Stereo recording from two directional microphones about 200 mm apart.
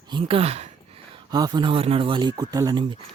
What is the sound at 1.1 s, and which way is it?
Speech, 20° right (ahead or behind).